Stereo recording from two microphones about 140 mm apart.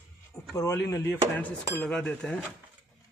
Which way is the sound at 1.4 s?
10° left (ahead or behind).